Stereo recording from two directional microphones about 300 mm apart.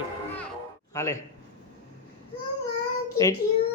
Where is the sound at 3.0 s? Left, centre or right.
Centre.